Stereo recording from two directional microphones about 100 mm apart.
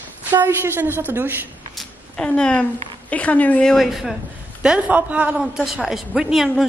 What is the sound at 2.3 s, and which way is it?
A woman's voice, 10° left (ahead or behind).